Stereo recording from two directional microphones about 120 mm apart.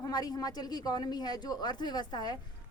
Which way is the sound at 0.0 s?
35° left (ahead or behind).